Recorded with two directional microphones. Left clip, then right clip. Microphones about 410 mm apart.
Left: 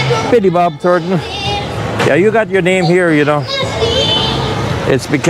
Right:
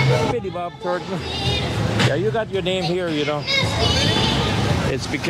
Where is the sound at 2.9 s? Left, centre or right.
Left.